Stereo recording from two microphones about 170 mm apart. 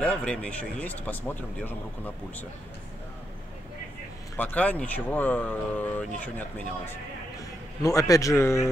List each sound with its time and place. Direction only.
0.0 s speech: 5° left (ahead or behind)
4.4 s speech: 10° left (ahead or behind)
6.9 s a man's voice: 20° left (ahead or behind)